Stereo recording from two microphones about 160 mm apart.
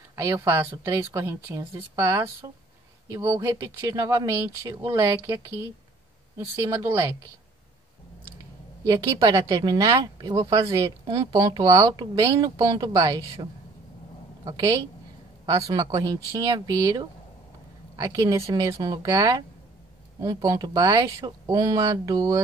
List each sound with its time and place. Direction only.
0.1 s speech: 20° right (ahead or behind)
8.8 s speech: 25° right (ahead or behind)